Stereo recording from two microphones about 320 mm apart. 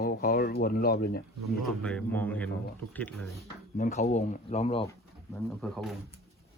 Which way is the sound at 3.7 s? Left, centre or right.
Left.